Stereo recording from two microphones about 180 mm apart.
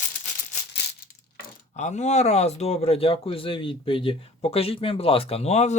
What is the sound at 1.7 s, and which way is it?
Speech, 40° left (ahead or behind).